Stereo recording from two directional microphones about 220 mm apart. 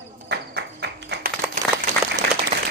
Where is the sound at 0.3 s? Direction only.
50° right (ahead or behind).